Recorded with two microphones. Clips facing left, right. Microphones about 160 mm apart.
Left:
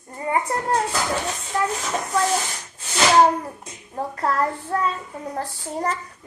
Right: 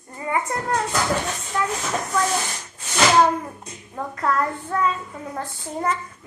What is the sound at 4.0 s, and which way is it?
A child's voice, 35° left (ahead or behind).